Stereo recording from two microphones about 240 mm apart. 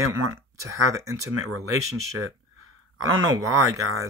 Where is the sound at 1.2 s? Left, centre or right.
Right.